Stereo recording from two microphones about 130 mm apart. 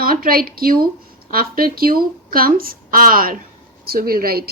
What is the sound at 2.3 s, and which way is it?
A woman's voice, 90° right.